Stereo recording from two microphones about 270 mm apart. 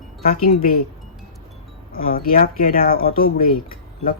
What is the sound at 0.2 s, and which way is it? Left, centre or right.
Speech, left.